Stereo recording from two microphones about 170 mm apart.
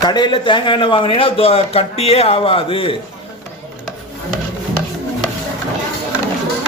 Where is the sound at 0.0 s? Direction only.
25° left (ahead or behind).